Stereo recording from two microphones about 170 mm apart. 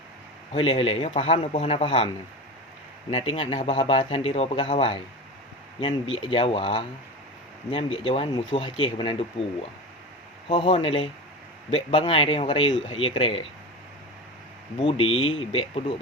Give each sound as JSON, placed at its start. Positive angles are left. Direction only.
{"t": 0.5, "sound": "a man's voice", "side_deg": 30}
{"t": 3.1, "sound": "a man's voice", "side_deg": 30}
{"t": 10.5, "sound": "a man's voice", "side_deg": 30}
{"t": 14.8, "sound": "a man's voice", "side_deg": 30}